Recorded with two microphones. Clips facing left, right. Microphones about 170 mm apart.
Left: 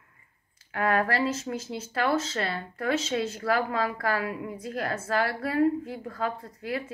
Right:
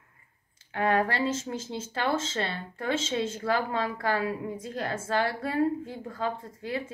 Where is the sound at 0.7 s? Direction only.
25° right (ahead or behind).